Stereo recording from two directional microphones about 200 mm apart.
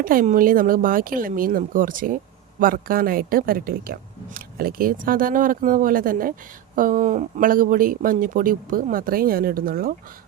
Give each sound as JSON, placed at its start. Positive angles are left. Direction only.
{"t": 0.0, "sound": "speech", "side_deg": -45}